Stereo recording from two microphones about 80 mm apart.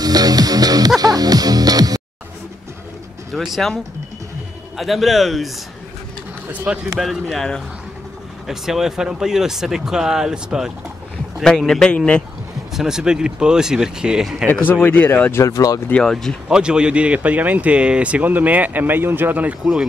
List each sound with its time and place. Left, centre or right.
0.0 s music: right
3.3 s a man's voice: centre
6.6 s speech: centre
7.0 s a man's voice: centre
8.5 s speech: centre
11.4 s a man's voice: centre
12.7 s speech: centre
14.7 s speech: left
15.3 s speech: left
15.9 s a man's voice: centre
16.4 s speech: centre
19.6 s speech: centre